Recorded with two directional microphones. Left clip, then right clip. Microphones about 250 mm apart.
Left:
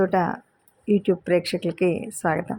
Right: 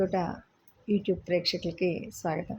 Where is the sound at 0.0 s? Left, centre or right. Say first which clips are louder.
Left 8 dB; centre.